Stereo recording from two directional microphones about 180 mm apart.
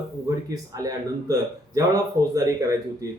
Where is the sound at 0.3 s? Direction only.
20° right (ahead or behind).